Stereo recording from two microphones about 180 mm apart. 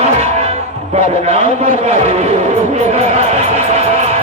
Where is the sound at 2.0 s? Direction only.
35° right (ahead or behind).